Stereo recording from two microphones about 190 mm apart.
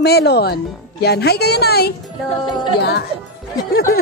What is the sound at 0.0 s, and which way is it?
Speech, 60° left (ahead or behind).